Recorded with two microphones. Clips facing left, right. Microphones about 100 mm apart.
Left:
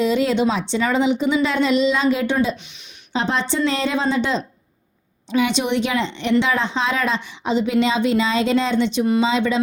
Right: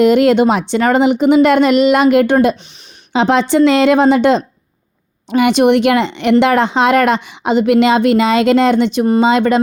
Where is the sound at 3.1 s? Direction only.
75° right (ahead or behind).